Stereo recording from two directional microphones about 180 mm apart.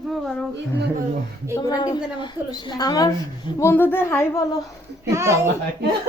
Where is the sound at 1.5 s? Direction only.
20° left (ahead or behind).